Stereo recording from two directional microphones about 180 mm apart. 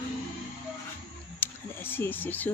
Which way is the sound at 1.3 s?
10° left (ahead or behind).